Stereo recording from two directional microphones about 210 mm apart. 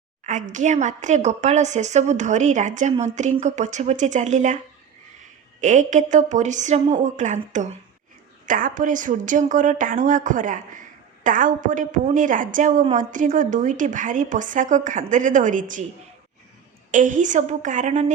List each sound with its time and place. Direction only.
0.3 s a woman's voice: 35° right (ahead or behind)
5.5 s a woman's voice: 35° right (ahead or behind)
16.9 s a woman's voice: 35° right (ahead or behind)